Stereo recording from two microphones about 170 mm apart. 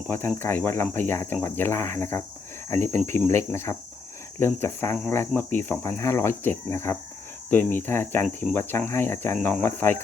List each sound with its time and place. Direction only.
0.1 s speech: 15° left (ahead or behind)